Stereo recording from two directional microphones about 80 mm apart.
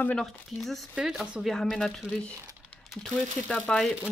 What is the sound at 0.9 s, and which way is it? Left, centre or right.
Speech, centre.